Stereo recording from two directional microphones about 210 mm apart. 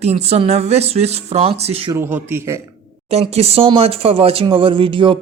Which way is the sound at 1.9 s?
10° right (ahead or behind).